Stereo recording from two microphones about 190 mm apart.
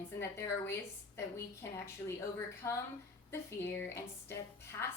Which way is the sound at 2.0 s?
15° left (ahead or behind).